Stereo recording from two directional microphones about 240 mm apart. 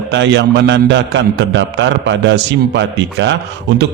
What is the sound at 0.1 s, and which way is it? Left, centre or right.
A man's voice, right.